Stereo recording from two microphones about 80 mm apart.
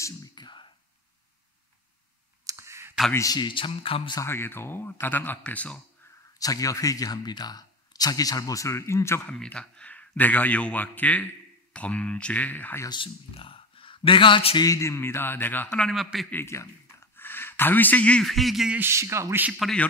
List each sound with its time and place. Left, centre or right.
0.0 s whispering: left
2.4 s clicking: right
3.3 s speech: left
4.2 s speech: left
6.4 s speech: left
9.3 s speech: centre
12.9 s speech: left
14.6 s speech: left
15.9 s speech: centre
16.4 s a sound: left; by 18.2 s centre
18.2 s speech: centre
18.8 s speech: right